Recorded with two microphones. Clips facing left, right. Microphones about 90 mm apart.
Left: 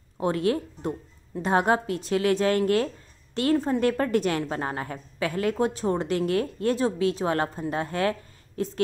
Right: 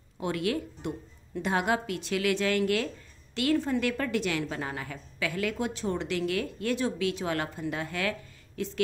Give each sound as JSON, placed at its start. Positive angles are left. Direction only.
{"t": 0.2, "sound": "a woman's voice", "side_deg": 35}